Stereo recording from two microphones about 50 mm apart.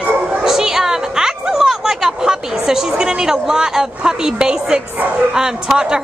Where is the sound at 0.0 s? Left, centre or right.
Right.